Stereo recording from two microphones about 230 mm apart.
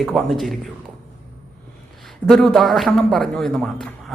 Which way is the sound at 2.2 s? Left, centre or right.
Centre.